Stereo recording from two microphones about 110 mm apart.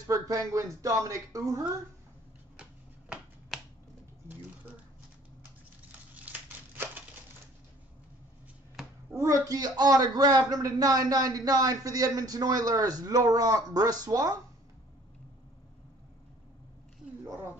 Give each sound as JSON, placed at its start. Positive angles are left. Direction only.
{"t": 0.0, "sound": "speech", "side_deg": -30}
{"t": 2.5, "sound": "shuffling cards", "side_deg": -10}
{"t": 5.9, "sound": "crumpling", "side_deg": -15}
{"t": 9.1, "sound": "a man's voice", "side_deg": -30}